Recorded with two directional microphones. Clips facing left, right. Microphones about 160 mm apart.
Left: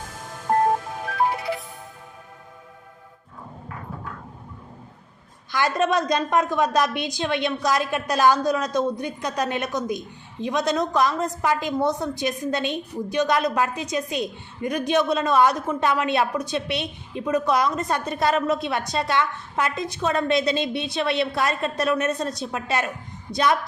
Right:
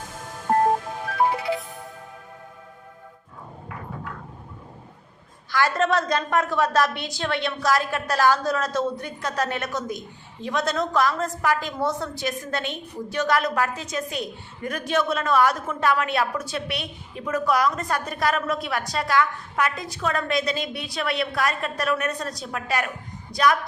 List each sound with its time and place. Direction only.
5.5 s a woman's voice: 20° left (ahead or behind)